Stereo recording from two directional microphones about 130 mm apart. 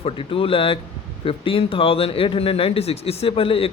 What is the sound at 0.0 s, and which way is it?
Speech, 45° left (ahead or behind).